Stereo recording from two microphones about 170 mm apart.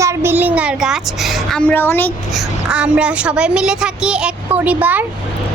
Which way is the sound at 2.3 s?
5° right (ahead or behind).